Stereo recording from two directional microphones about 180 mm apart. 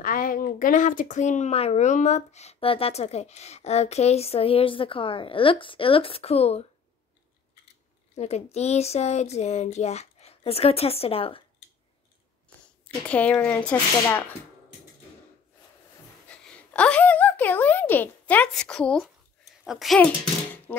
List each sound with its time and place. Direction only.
0.0 s speech: 50° left (ahead or behind); by 6.6 s 35° left (ahead or behind)
8.2 s speech: 35° left (ahead or behind)
12.8 s speech: 5° left (ahead or behind)
16.3 s a woman's voice: 5° left (ahead or behind)